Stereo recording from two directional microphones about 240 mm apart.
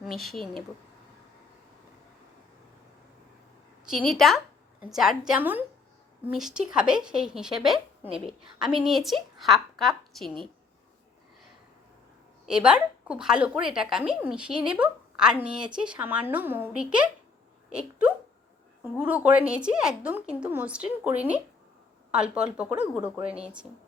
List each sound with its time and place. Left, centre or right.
0.0 s a woman's voice: centre
3.8 s a woman's voice: centre
12.5 s a woman's voice: centre